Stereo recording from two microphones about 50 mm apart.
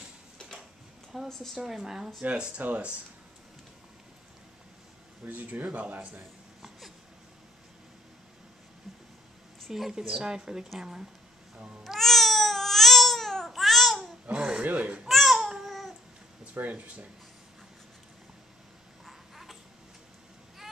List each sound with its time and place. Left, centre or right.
1.1 s a woman's voice: centre
2.2 s speech: right
5.2 s speech: right
9.7 s speech: centre
11.5 s speech: right
11.8 s babbling: centre
14.3 s a sound: centre
14.6 s speech: right
15.0 s babbling: centre
16.5 s speech: right
19.0 s a sound: centre